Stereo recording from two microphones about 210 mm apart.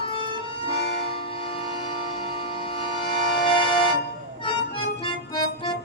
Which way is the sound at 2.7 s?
25° left (ahead or behind).